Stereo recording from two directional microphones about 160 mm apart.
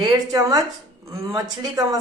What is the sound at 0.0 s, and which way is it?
A woman's voice, 25° right (ahead or behind).